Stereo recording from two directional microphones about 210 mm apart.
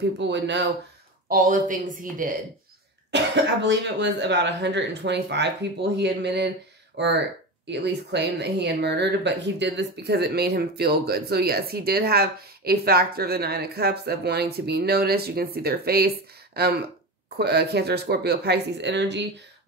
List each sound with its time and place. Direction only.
0.2 s speech: 55° right (ahead or behind)
1.3 s a woman's voice: 40° right (ahead or behind)
3.1 s speech: 55° right (ahead or behind)